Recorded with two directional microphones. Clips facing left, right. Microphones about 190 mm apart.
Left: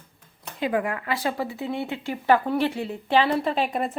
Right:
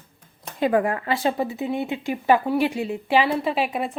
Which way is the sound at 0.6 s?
45° right (ahead or behind).